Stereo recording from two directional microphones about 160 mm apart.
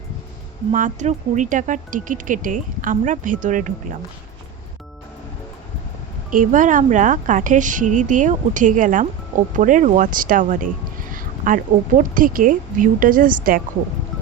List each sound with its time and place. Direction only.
0.7 s a woman's voice: 50° right (ahead or behind)
6.3 s a woman's voice: 55° right (ahead or behind)